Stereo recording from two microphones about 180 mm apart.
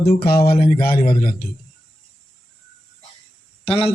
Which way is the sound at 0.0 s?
65° left (ahead or behind).